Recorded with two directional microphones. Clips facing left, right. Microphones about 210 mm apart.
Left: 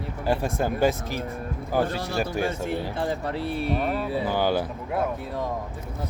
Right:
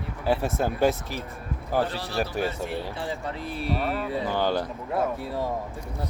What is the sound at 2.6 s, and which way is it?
Speech, 50° left (ahead or behind).